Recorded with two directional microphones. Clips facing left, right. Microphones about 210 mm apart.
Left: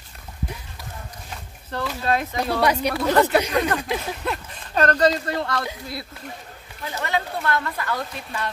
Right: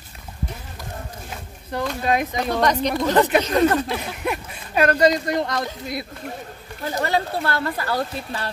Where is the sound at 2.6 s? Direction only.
10° left (ahead or behind).